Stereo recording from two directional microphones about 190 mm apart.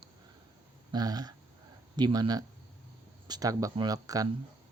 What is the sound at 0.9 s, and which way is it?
Speech, 20° right (ahead or behind).